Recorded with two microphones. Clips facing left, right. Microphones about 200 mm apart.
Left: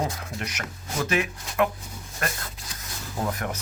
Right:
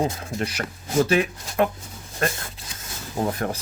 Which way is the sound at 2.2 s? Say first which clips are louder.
Right 6 dB; 30° right (ahead or behind).